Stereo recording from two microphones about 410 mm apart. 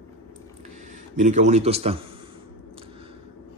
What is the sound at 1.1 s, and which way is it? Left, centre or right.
Speech, centre.